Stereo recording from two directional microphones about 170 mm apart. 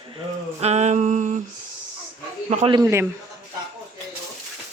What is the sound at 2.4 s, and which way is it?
Speech, 45° right (ahead or behind).